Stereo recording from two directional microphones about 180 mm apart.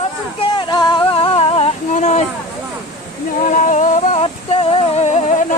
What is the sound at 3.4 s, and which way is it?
Music, 45° left (ahead or behind).